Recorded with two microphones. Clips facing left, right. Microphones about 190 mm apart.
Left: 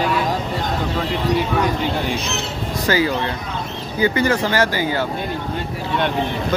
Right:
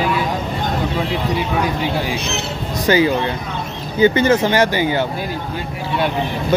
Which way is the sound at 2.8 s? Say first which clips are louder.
Right 4 dB; 20° right (ahead or behind).